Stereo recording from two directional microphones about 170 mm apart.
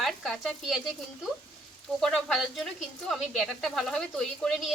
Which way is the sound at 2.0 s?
Centre (ahead or behind).